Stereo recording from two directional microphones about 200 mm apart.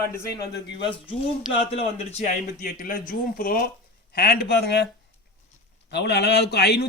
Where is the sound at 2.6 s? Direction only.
45° left (ahead or behind).